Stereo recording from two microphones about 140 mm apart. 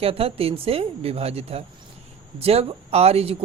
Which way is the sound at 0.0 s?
45° right (ahead or behind).